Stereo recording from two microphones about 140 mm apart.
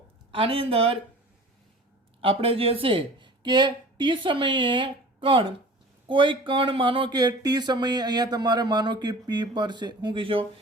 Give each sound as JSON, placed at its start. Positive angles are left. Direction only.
{"t": 0.3, "sound": "speech", "side_deg": -40}
{"t": 2.2, "sound": "speech", "side_deg": -40}